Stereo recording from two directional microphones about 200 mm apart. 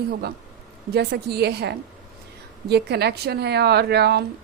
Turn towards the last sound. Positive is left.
turn(degrees=-55)  # may be behind; listen again after turning